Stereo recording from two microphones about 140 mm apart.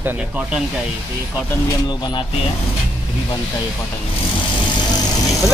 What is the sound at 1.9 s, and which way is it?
Speech, 30° left (ahead or behind).